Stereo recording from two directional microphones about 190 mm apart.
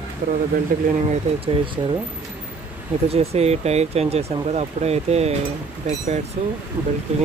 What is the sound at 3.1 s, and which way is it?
Speech, 35° right (ahead or behind).